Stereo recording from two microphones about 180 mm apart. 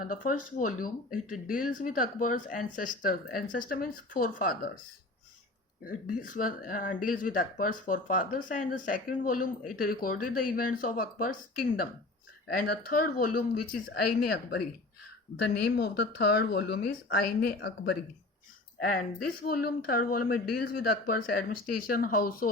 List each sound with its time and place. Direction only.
0.0 s speech: 50° left (ahead or behind)
6.1 s speech: 50° left (ahead or behind); by 17.9 s 65° left (ahead or behind)
18.9 s speech: 50° left (ahead or behind)